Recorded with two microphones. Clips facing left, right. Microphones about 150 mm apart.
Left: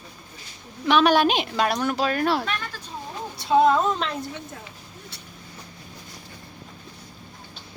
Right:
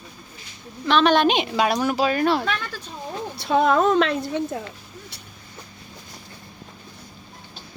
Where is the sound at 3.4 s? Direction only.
65° right (ahead or behind).